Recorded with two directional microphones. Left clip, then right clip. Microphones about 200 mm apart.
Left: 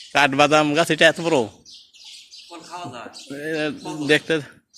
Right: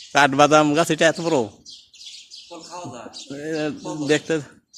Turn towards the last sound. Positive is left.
turn(degrees=-15)  # may be behind; listen again after turning